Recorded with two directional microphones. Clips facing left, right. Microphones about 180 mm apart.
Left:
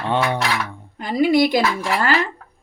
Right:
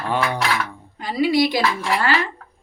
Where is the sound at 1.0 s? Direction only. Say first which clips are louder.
Left 2 dB; 50° left (ahead or behind).